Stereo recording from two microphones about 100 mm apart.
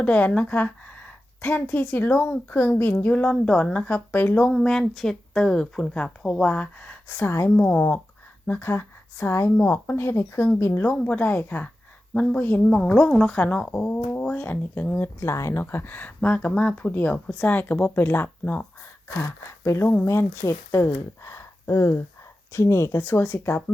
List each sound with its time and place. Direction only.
0.0 s speech: 15° left (ahead or behind)
4.5 s speech: 5° left (ahead or behind); by 7.5 s 25° left (ahead or behind)
7.5 s speech: 15° left (ahead or behind)
19.0 s speech: 30° left (ahead or behind)